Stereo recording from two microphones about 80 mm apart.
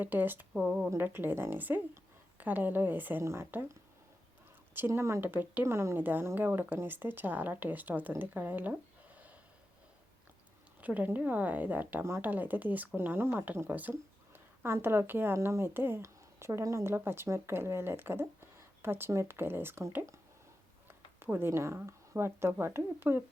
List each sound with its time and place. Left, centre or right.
0.0 s speech: right
0.6 s speech: centre
0.9 s speech: right
4.9 s speech: right
10.8 s a woman's voice: centre